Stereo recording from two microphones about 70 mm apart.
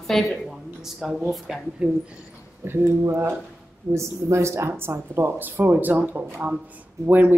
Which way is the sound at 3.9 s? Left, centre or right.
Right.